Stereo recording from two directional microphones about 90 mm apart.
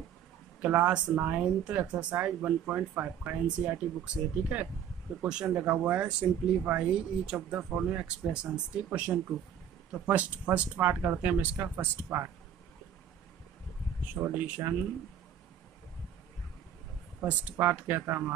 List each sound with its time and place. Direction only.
0.6 s speech: 15° right (ahead or behind)
14.2 s speech: 25° right (ahead or behind)
17.2 s speech: 20° right (ahead or behind)